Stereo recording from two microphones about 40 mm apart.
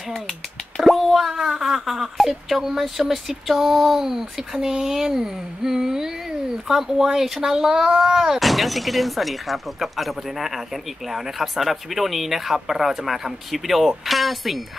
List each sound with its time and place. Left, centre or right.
0.8 s speech: centre
8.4 s speech: centre